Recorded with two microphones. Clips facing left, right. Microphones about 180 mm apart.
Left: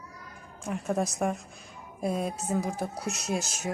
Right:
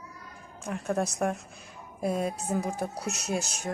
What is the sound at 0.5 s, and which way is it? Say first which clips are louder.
A woman's voice: even; centre (ahead or behind).